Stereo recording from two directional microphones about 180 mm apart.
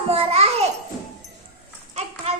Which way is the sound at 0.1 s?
35° right (ahead or behind).